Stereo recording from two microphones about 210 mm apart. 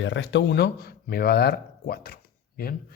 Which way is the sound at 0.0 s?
60° left (ahead or behind).